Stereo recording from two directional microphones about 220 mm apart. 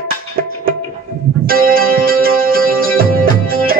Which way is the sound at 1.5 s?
40° right (ahead or behind).